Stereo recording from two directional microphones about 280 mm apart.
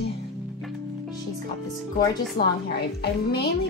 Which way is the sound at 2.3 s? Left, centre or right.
Left.